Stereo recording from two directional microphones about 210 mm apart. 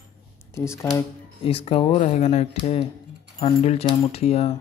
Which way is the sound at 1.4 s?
25° left (ahead or behind).